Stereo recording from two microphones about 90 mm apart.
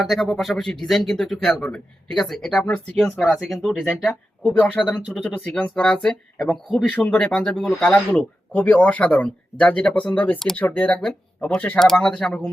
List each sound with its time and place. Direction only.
0.1 s a man's voice: 5° left (ahead or behind)
2.6 s speech: 15° left (ahead or behind)
3.2 s a man's voice: centre (ahead or behind)
4.6 s speech: 15° left (ahead or behind)
8.5 s speech: 15° left (ahead or behind)
11.0 s speech: 5° left (ahead or behind)